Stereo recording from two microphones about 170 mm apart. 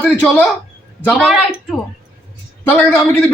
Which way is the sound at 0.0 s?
10° left (ahead or behind).